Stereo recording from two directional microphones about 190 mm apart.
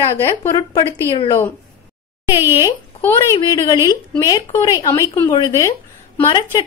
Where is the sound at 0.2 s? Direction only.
15° left (ahead or behind).